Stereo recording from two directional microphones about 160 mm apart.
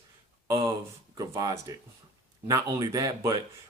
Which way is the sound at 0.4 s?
20° right (ahead or behind).